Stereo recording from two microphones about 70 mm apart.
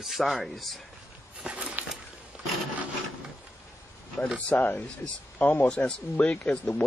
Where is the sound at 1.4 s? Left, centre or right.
Centre.